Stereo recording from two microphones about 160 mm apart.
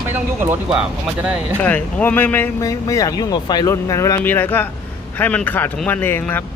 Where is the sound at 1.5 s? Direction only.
10° left (ahead or behind).